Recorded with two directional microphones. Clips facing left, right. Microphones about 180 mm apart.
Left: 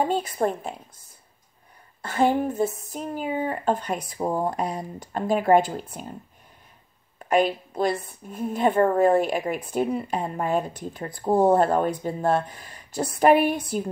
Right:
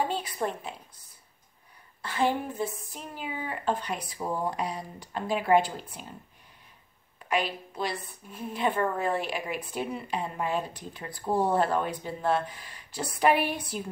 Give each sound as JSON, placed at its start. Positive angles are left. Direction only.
{"t": 0.1, "sound": "a woman's voice", "side_deg": 45}
{"t": 2.0, "sound": "a woman's voice", "side_deg": 45}
{"t": 7.2, "sound": "a woman's voice", "side_deg": 45}